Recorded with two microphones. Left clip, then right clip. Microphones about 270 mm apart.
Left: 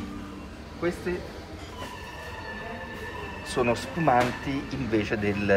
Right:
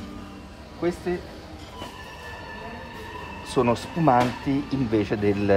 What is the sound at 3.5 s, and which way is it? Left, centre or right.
Speech, right.